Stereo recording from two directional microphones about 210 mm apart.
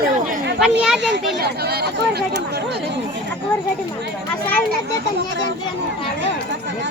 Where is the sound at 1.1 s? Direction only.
50° right (ahead or behind).